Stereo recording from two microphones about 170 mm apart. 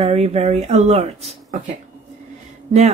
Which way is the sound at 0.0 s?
35° right (ahead or behind).